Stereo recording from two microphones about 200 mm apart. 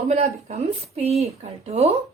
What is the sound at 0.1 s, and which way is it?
A woman's voice, 35° right (ahead or behind).